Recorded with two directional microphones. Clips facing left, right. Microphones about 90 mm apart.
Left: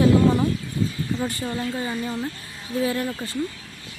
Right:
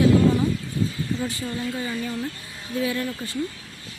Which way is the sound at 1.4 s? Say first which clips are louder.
Left 1 dB; 25° left (ahead or behind).